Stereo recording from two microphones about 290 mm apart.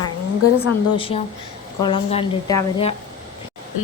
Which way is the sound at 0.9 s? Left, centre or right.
Centre.